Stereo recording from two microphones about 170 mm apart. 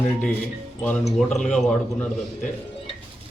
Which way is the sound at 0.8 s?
5° left (ahead or behind).